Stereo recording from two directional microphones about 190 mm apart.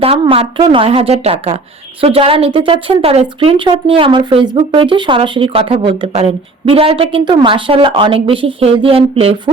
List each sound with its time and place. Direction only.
0.0 s a woman's voice: 30° right (ahead or behind)